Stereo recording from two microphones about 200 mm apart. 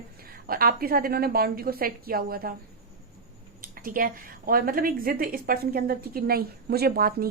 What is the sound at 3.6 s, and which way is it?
A woman's voice, 45° right (ahead or behind).